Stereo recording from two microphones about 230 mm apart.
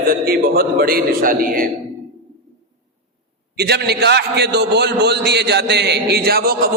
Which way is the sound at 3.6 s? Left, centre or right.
Right.